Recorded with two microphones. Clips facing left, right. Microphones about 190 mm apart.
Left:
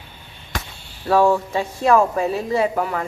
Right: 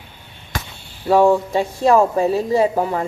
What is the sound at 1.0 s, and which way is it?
Speech, 20° right (ahead or behind).